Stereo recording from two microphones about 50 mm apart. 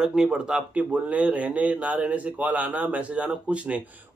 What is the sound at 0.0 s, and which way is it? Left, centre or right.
Speech, centre.